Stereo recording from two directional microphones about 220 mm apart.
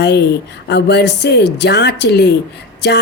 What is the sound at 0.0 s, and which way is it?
Speech, 50° left (ahead or behind).